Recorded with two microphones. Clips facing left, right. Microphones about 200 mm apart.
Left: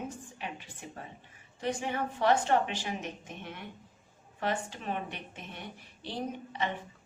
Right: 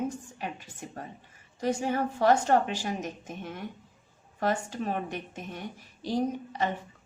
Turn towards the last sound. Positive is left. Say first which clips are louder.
# right 5 dB
turn(degrees=-40)  # may be behind; listen again after turning